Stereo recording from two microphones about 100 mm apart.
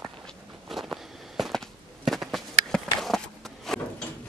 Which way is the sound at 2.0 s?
Centre (ahead or behind).